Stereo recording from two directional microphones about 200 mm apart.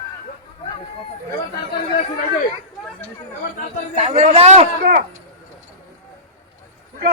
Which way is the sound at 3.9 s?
35° right (ahead or behind).